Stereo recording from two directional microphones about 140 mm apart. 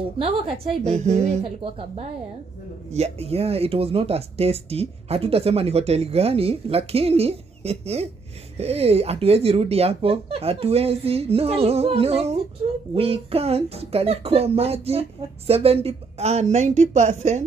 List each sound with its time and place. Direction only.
0.2 s speech: 50° right (ahead or behind)